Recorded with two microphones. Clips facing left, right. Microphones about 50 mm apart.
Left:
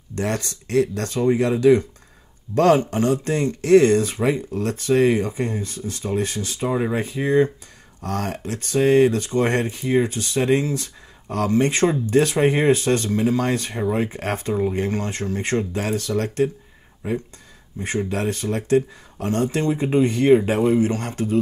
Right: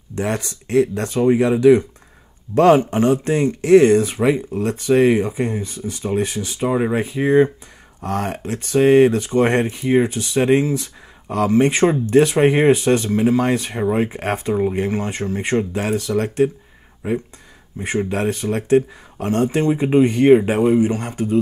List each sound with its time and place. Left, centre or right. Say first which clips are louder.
0.1 s speech: right 2 dB; centre
17.7 s speech: right 3 dB; right